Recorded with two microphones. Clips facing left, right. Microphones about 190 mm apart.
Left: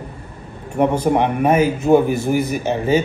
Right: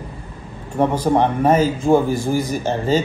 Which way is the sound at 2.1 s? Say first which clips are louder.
Left 2 dB; 65° left (ahead or behind).